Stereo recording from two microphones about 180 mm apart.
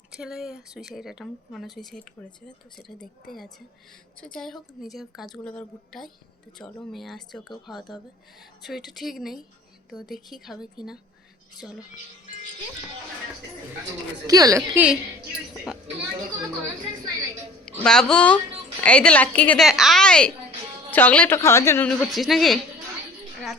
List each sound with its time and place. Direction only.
0.1 s a woman's voice: 5° right (ahead or behind)
14.3 s a woman's voice: 20° right (ahead or behind)
17.8 s a woman's voice: 5° left (ahead or behind)
21.8 s a woman's voice: centre (ahead or behind)